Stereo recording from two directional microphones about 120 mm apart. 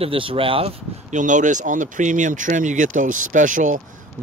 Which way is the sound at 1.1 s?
90° right.